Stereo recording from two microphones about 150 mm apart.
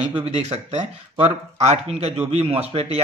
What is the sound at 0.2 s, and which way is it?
Speech, 50° right (ahead or behind).